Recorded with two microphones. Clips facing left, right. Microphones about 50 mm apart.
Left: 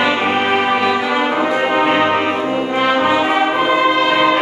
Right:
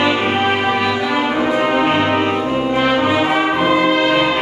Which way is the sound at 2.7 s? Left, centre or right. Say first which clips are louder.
Left 1 dB; centre.